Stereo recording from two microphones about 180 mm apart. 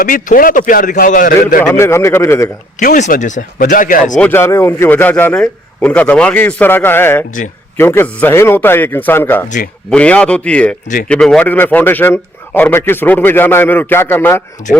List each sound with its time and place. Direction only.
0.0 s a man's voice: 50° left (ahead or behind)
1.7 s a man's voice: 15° left (ahead or behind)
2.7 s a man's voice: 45° left (ahead or behind)
4.2 s a man's voice: 15° left (ahead or behind)